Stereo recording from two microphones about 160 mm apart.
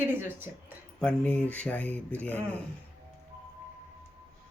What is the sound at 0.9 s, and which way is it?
Speech, 5° left (ahead or behind).